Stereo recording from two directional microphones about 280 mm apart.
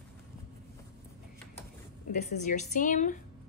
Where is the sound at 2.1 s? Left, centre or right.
Left.